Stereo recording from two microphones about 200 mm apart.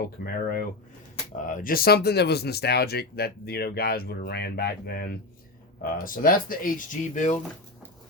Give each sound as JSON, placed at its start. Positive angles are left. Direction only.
{"t": 0.3, "sound": "speech", "side_deg": 45}